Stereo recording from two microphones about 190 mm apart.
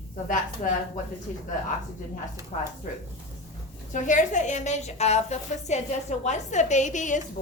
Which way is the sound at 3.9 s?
40° left (ahead or behind).